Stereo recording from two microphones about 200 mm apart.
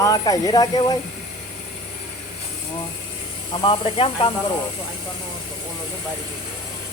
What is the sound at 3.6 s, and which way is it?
Speech, 25° left (ahead or behind).